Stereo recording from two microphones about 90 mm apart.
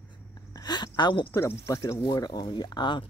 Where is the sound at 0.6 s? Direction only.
50° left (ahead or behind).